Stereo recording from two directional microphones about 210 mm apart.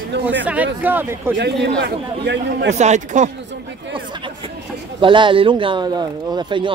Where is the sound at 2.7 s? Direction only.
35° right (ahead or behind).